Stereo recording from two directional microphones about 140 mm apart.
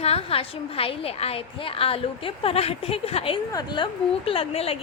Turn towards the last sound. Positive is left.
turn(degrees=45)  # may be behind; listen again after turning